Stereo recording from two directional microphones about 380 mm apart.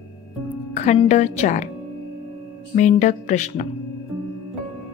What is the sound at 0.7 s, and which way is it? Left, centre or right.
Speech, centre.